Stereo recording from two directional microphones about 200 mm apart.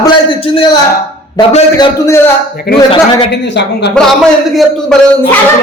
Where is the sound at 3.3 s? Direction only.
60° left (ahead or behind).